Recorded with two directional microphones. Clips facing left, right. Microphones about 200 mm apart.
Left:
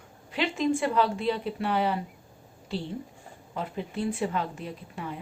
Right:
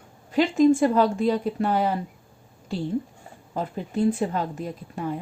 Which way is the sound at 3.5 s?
40° right (ahead or behind).